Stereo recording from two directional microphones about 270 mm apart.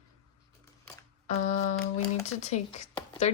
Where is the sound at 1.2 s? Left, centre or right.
Left.